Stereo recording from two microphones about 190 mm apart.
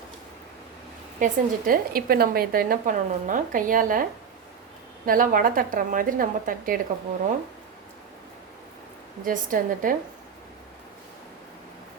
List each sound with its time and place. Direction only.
1.2 s a woman's voice: 50° right (ahead or behind)
5.0 s a woman's voice: 45° right (ahead or behind)
9.2 s a woman's voice: 45° right (ahead or behind)